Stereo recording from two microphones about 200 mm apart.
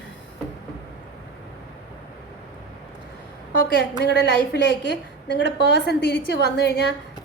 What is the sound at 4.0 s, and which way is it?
A woman's voice, 55° left (ahead or behind).